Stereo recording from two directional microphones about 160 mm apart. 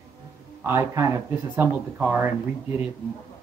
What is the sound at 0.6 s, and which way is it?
Speech, 15° right (ahead or behind).